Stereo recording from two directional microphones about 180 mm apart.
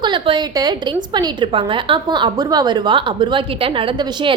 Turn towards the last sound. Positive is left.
turn(degrees=-30)  # may be behind; listen again after turning